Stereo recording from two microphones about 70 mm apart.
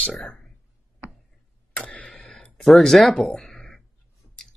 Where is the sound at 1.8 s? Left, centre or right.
Centre.